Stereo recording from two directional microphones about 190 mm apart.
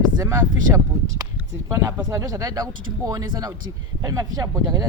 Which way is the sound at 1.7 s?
15° right (ahead or behind).